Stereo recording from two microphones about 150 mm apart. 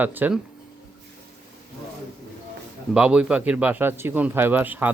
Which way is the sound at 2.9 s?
5° right (ahead or behind).